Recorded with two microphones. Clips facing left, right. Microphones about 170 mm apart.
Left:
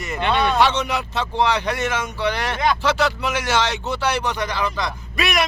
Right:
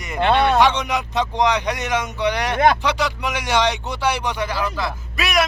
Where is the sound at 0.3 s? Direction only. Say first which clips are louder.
Right 3 dB; 60° right (ahead or behind).